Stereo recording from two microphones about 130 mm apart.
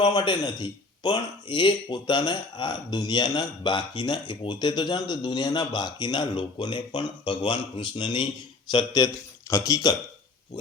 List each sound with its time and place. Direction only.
0.0 s a man's voice: 35° left (ahead or behind)